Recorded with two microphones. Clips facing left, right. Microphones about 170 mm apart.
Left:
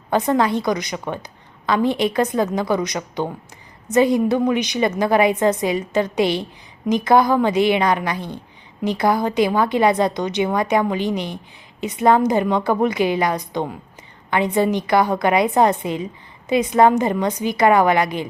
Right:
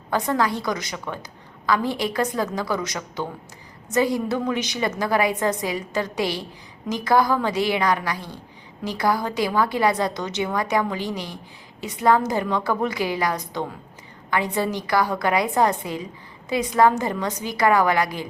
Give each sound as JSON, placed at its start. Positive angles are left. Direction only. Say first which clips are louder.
{"t": 0.1, "sound": "a woman's voice", "louder": "left 5 dB", "side_deg": 20}